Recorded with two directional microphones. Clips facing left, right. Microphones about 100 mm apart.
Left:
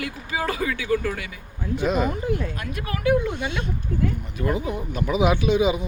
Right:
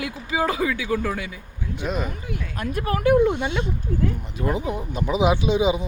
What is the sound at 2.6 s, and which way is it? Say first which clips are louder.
Speech: right 5 dB; 40° right (ahead or behind).